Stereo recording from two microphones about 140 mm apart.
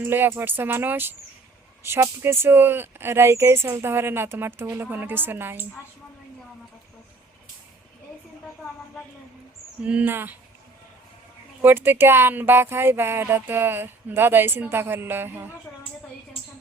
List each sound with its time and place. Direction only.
0.0 s speech: 15° right (ahead or behind)
9.8 s speech: 10° right (ahead or behind)
11.6 s speech: 15° right (ahead or behind)